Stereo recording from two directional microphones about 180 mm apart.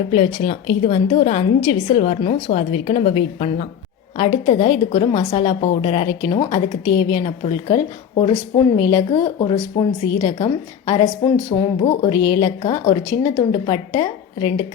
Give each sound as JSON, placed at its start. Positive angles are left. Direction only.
{"t": 0.4, "sound": "a woman's voice", "side_deg": 35}